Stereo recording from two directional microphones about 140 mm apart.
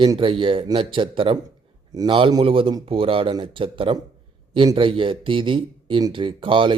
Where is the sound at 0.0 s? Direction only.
35° right (ahead or behind).